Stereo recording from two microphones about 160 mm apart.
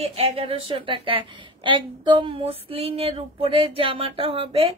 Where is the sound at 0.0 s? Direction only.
40° right (ahead or behind).